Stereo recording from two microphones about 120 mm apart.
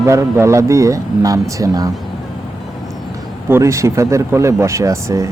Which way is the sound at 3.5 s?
25° right (ahead or behind).